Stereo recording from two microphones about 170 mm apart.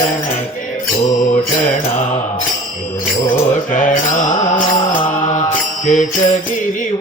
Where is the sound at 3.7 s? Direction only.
50° left (ahead or behind).